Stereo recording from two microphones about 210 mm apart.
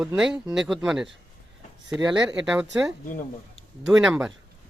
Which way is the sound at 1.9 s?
20° right (ahead or behind).